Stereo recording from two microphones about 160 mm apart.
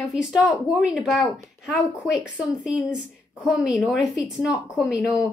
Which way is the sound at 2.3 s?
5° right (ahead or behind).